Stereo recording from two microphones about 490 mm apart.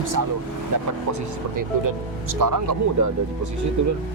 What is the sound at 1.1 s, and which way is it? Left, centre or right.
Speech, right.